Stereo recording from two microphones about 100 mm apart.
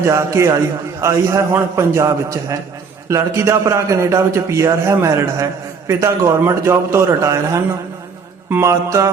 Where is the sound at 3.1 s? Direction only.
30° right (ahead or behind).